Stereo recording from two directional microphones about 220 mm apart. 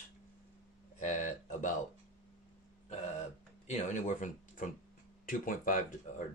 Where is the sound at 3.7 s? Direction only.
35° left (ahead or behind).